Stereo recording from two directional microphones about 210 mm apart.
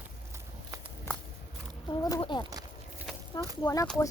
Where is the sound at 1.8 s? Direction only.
20° left (ahead or behind).